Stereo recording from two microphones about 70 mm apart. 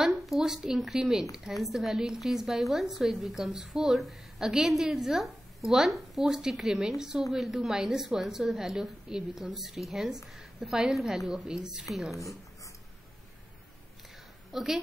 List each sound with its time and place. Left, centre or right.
0.3 s a woman's voice: centre
12.2 s a sound: left
14.5 s a woman's voice: centre